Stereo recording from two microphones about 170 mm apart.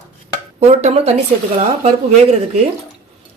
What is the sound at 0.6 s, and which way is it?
Speech, 40° right (ahead or behind).